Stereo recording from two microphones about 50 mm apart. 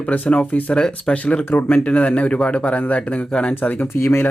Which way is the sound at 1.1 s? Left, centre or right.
Left.